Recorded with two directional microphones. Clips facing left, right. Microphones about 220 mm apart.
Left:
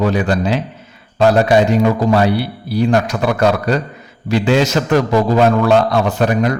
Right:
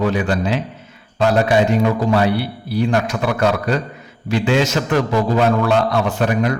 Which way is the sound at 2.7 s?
40° left (ahead or behind).